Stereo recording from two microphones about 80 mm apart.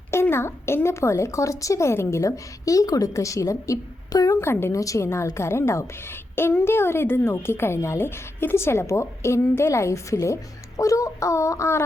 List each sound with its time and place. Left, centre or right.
0.1 s a woman's voice: left
4.4 s a woman's voice: left
4.8 s a woman's voice: left